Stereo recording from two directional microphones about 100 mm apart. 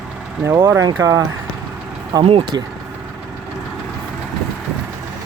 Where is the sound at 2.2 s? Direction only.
65° right (ahead or behind).